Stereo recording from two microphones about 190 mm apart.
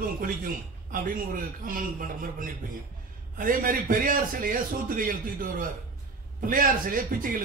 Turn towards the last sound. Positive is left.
turn(degrees=-45)  # may be behind; listen again after turning